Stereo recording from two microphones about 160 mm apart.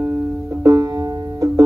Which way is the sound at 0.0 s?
15° right (ahead or behind).